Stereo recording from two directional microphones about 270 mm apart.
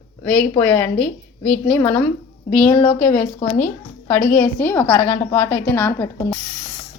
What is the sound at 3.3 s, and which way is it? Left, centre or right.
Speech, centre.